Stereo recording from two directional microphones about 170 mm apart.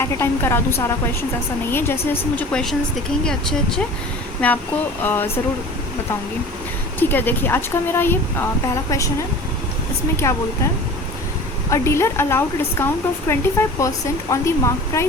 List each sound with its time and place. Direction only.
0.0 s speech: 15° left (ahead or behind)
7.0 s speech: 10° left (ahead or behind)
10.2 s speech: 15° left (ahead or behind)
11.7 s speech: 15° left (ahead or behind)